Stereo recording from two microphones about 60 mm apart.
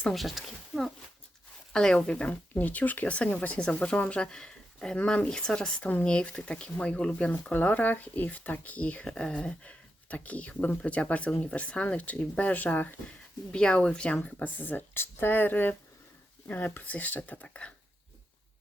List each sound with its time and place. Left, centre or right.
0.1 s speech: centre
1.7 s speech: centre
2.0 s speech: left
5.8 s speech: left
6.1 s speech: centre
9.0 s speech: centre; by 13.0 s left
13.5 s speech: centre
14.3 s speech: left